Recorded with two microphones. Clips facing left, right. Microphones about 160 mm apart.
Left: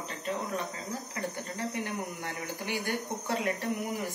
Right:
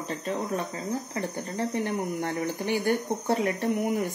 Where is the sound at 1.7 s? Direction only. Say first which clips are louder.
Right 7 dB; 40° right (ahead or behind).